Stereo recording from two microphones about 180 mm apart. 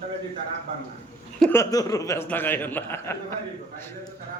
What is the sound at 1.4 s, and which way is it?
A man's voice, 15° left (ahead or behind).